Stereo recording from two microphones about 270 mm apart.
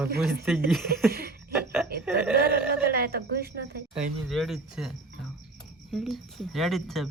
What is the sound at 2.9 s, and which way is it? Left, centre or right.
Speech, right.